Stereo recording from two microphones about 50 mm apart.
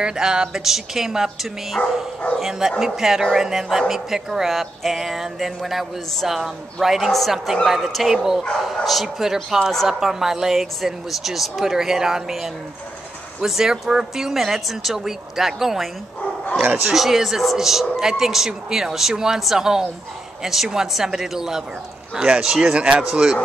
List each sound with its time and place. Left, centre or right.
0.0 s a woman's voice: centre